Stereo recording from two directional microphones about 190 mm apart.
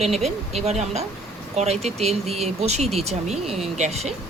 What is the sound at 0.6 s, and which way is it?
Speech, 35° right (ahead or behind).